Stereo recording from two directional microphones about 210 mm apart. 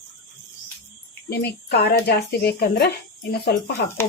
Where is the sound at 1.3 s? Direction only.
45° left (ahead or behind).